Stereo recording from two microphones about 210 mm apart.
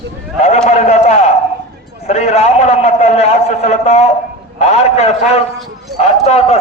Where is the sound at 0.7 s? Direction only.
30° left (ahead or behind).